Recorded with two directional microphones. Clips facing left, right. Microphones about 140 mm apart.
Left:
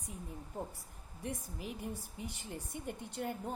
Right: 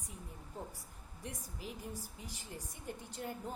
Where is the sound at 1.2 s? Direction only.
60° left (ahead or behind).